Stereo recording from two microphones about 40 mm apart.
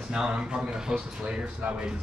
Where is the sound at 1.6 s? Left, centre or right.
Right.